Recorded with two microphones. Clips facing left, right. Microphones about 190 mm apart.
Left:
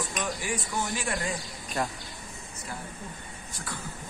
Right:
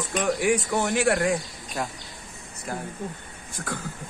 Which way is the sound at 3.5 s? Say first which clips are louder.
Right 7 dB; 50° right (ahead or behind).